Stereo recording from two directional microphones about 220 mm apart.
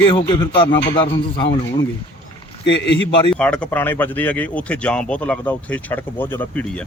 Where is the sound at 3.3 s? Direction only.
5° left (ahead or behind).